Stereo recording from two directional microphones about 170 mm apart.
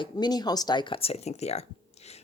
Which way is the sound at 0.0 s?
25° left (ahead or behind).